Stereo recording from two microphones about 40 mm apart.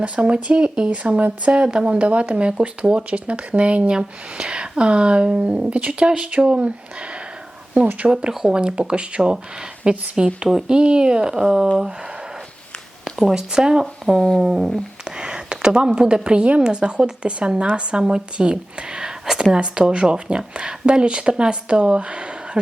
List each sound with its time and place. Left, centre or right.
0.0 s speech: right
5.8 s speech: right
8.0 s speech: right
13.1 s speech: centre
14.0 s speech: centre
14.3 s speech: centre
15.0 s a sound: right
16.6 s speech: right